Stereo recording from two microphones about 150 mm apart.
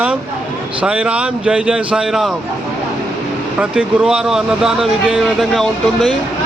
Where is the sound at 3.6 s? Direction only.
5° right (ahead or behind).